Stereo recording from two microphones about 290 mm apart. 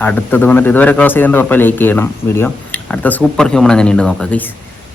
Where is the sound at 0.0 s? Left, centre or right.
Centre.